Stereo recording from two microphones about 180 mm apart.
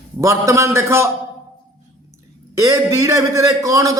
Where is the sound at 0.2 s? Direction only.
15° right (ahead or behind).